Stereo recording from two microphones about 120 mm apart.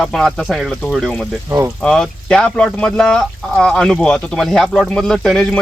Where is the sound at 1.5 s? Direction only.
20° right (ahead or behind).